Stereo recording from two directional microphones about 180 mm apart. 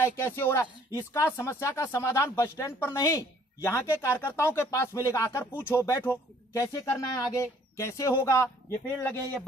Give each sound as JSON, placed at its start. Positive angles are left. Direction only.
{"t": 0.0, "sound": "speech", "side_deg": 15}